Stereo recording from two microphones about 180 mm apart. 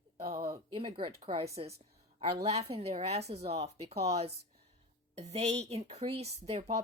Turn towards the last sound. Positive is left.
turn(degrees=-35)  # may be behind; listen again after turning